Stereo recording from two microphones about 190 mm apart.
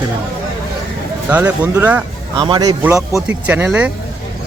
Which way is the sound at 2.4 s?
25° right (ahead or behind).